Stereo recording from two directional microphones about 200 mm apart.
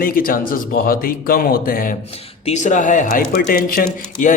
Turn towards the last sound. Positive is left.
turn(degrees=40)  # may be behind; listen again after turning